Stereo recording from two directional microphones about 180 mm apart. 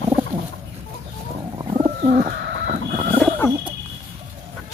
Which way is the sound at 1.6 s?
30° right (ahead or behind).